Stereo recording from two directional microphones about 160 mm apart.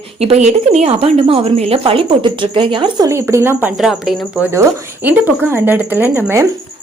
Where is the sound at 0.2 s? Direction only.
40° right (ahead or behind).